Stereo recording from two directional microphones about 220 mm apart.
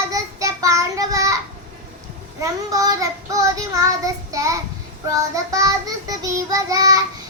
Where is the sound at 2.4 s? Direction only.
15° right (ahead or behind).